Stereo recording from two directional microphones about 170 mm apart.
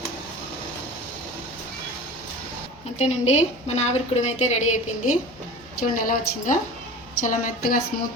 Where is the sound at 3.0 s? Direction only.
40° left (ahead or behind).